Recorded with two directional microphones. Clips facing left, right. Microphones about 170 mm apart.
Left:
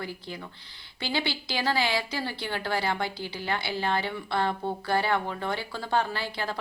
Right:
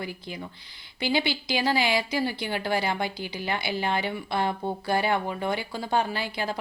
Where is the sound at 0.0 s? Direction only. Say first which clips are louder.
Right 2 dB; 15° right (ahead or behind).